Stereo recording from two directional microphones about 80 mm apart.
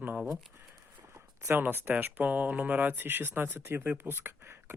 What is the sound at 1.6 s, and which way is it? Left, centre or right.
A man's voice, right.